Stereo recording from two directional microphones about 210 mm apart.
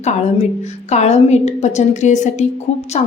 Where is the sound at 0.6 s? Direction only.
30° left (ahead or behind).